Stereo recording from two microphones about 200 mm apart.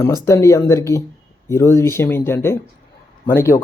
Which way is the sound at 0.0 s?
15° left (ahead or behind).